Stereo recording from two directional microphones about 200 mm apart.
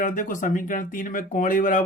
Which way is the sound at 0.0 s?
40° left (ahead or behind).